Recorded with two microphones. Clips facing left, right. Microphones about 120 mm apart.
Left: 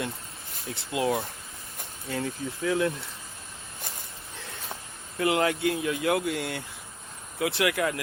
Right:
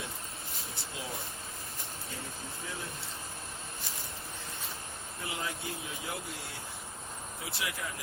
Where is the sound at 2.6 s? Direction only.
75° left (ahead or behind).